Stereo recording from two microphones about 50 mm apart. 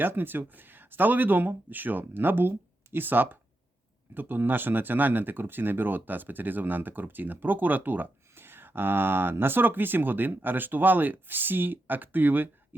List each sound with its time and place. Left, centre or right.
0.0 s speech: right